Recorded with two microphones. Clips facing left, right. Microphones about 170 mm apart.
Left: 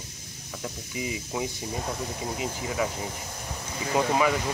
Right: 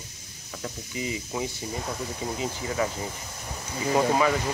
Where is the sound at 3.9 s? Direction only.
5° left (ahead or behind).